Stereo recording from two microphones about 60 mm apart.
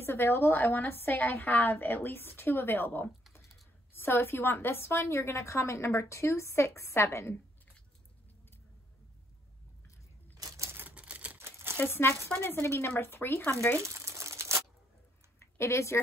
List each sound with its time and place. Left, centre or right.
0.0 s a woman's voice: left
10.3 s a sound: right
10.7 s typewriter: right
11.0 s typewriter: right
11.3 s crumpling: right
11.8 s a woman's voice: left
13.7 s crumpling: right
15.3 s a sound: left